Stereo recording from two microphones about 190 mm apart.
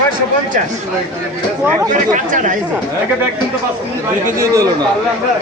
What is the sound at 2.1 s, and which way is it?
Speech, 40° right (ahead or behind).